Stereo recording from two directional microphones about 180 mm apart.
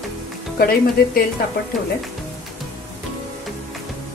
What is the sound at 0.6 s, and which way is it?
Speech, 55° left (ahead or behind).